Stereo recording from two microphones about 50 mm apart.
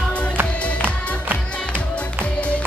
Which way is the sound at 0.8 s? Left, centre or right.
Right.